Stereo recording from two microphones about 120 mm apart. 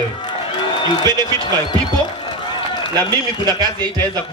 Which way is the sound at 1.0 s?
35° right (ahead or behind).